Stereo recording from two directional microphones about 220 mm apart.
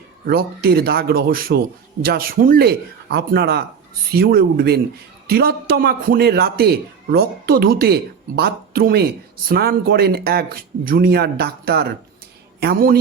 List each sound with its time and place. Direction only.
0.3 s a man's voice: 45° right (ahead or behind)